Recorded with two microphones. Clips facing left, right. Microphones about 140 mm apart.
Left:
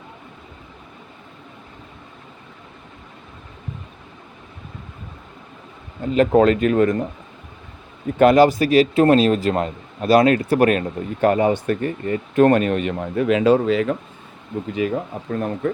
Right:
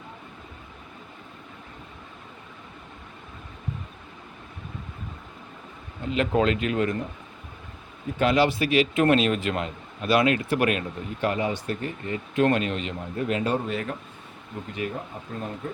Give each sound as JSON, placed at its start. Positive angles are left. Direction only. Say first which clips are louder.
{"t": 6.1, "sound": "a man's voice", "louder": "left 8 dB", "side_deg": 40}
{"t": 8.2, "sound": "a man's voice", "louder": "left 9 dB", "side_deg": 45}
{"t": 14.8, "sound": "speech", "louder": "left 9 dB", "side_deg": 85}